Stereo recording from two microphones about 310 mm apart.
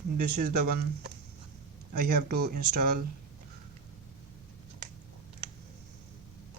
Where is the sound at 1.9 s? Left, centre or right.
Right.